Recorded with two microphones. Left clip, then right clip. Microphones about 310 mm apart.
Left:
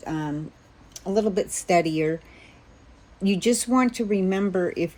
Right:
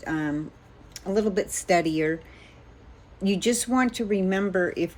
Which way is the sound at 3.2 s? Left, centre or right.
Centre.